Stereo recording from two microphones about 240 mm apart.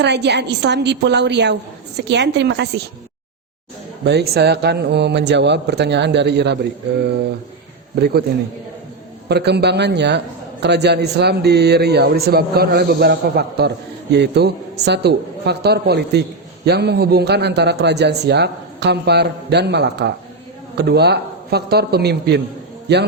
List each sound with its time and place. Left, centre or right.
0.0 s a man's voice: right
4.0 s a man's voice: right
7.9 s a man's voice: right
9.3 s a man's voice: right